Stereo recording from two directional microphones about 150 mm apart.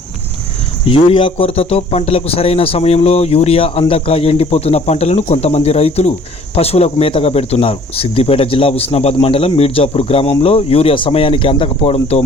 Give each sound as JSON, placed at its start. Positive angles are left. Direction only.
{"t": 0.9, "sound": "a man's voice", "side_deg": 35}